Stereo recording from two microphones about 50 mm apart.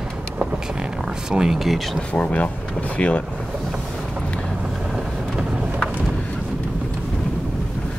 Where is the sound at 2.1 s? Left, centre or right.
Left.